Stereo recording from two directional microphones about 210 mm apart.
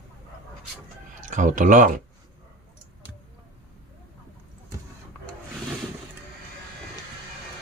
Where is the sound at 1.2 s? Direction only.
35° right (ahead or behind).